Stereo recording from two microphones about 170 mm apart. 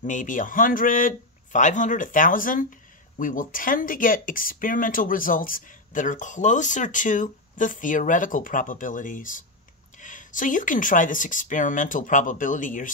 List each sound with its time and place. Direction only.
0.0 s speech: 50° left (ahead or behind)